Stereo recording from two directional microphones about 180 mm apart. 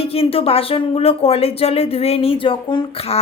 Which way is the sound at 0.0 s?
30° left (ahead or behind).